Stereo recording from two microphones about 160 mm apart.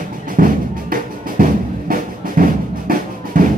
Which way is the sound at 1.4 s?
60° right (ahead or behind).